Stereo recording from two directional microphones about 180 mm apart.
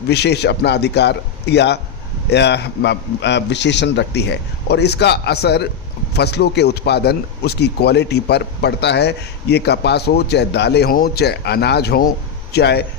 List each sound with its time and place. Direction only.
0.1 s a man's voice: 65° left (ahead or behind)